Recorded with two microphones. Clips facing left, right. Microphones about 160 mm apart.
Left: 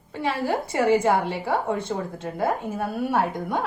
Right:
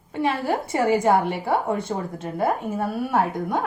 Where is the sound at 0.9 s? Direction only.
15° right (ahead or behind).